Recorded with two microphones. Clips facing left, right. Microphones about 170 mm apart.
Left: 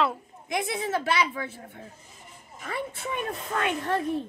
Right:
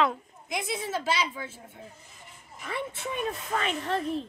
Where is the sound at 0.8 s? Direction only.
60° left (ahead or behind).